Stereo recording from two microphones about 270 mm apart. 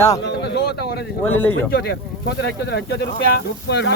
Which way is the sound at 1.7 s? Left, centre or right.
Left.